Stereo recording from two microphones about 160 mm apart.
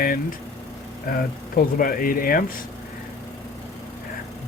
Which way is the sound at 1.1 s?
65° left (ahead or behind).